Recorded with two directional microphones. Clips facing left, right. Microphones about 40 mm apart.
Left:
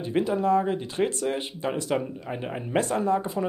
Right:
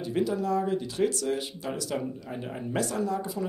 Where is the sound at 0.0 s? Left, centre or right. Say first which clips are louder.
Left 3 dB; left.